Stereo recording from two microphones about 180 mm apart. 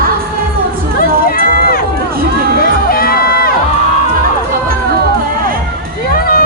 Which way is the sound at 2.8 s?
55° left (ahead or behind).